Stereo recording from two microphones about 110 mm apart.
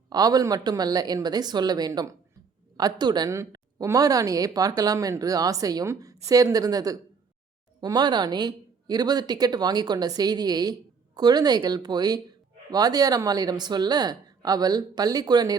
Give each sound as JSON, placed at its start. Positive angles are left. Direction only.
{"t": 0.1, "sound": "a woman's voice", "side_deg": -35}